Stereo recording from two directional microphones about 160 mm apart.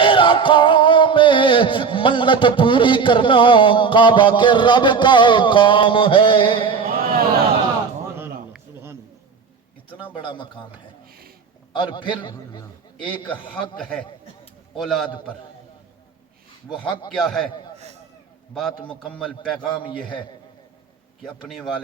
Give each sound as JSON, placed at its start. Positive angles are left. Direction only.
{"t": 0.0, "sound": "music", "side_deg": 30}
{"t": 6.8, "sound": "a sound", "side_deg": -65}
{"t": 10.2, "sound": "speech", "side_deg": 30}
{"t": 11.7, "sound": "a man's voice", "side_deg": 30}
{"t": 13.5, "sound": "speech", "side_deg": 5}
{"t": 16.6, "sound": "speech", "side_deg": 30}
{"t": 17.1, "sound": "speech", "side_deg": 5}
{"t": 18.9, "sound": "a man's voice", "side_deg": 5}
{"t": 19.8, "sound": "music", "side_deg": 30}
{"t": 21.2, "sound": "speech", "side_deg": 5}